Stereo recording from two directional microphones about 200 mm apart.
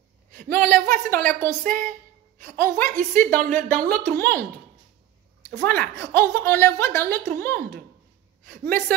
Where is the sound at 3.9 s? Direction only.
10° left (ahead or behind).